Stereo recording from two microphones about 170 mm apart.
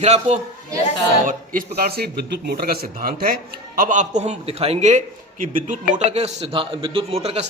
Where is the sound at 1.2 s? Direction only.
55° right (ahead or behind).